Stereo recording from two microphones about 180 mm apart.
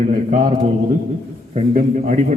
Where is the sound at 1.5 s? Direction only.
40° right (ahead or behind).